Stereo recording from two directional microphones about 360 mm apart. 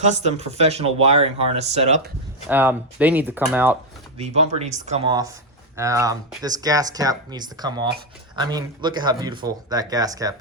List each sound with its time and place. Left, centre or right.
0.0 s speech: centre
2.5 s speech: centre
4.2 s speech: centre